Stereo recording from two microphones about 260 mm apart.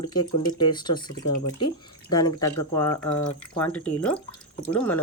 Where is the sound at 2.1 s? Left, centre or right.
Centre.